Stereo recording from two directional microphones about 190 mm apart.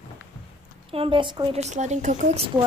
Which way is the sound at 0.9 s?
30° right (ahead or behind).